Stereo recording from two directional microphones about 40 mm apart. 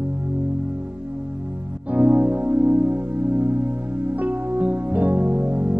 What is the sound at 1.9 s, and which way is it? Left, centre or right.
Music, right.